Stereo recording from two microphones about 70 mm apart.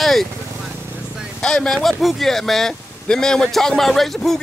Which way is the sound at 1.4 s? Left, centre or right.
Centre.